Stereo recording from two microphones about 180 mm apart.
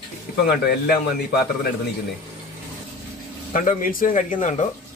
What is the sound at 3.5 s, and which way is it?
Speech, 50° left (ahead or behind).